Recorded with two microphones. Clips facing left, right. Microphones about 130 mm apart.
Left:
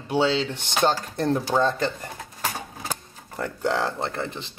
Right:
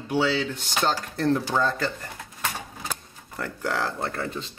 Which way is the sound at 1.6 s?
20° left (ahead or behind).